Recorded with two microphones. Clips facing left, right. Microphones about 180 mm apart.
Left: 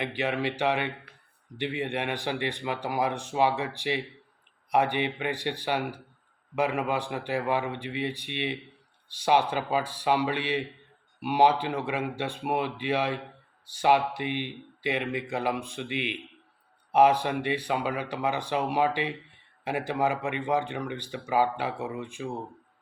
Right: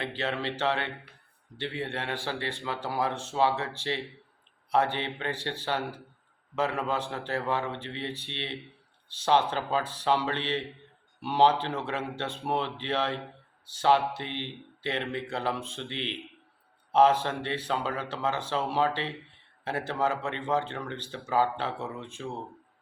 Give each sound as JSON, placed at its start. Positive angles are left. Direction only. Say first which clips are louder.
{"t": 0.0, "sound": "speech", "louder": "left 3 dB", "side_deg": 15}